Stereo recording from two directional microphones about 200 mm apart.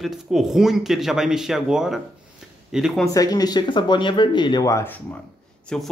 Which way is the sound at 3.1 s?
20° left (ahead or behind).